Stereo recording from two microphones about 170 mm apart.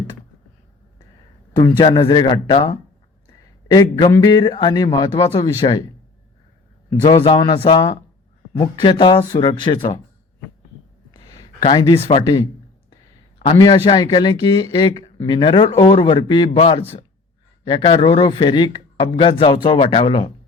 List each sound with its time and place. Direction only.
1.5 s speech: 25° left (ahead or behind)
7.0 s speech: 25° left (ahead or behind)
11.1 s a sound: 25° left (ahead or behind)
11.6 s speech: 25° left (ahead or behind)
13.6 s a man's voice: 25° left (ahead or behind)